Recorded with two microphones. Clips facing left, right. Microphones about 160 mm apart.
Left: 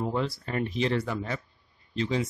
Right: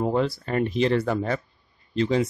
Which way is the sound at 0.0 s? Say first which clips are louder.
Right 6 dB; 55° right (ahead or behind).